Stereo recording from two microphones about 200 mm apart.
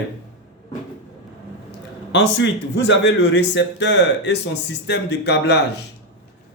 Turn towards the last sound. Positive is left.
turn(degrees=60)  # may be behind; listen again after turning